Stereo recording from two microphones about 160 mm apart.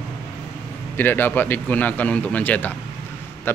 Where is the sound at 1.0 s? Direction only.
10° left (ahead or behind).